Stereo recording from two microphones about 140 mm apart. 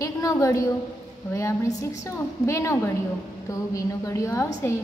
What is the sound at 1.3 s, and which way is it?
Female singing, 20° left (ahead or behind).